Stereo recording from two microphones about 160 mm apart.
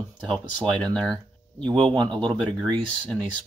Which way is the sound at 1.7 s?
30° right (ahead or behind).